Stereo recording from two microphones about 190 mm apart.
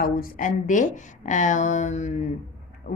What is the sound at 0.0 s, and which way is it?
A woman's voice, 45° left (ahead or behind).